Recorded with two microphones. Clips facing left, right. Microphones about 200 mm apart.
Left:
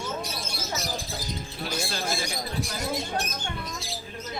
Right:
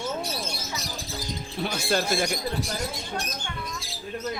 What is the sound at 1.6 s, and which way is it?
Speech, 55° right (ahead or behind).